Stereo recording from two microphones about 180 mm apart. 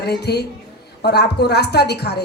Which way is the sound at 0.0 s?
65° left (ahead or behind).